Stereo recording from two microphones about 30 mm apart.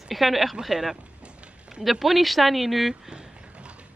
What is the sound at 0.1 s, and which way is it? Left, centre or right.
Speech, centre.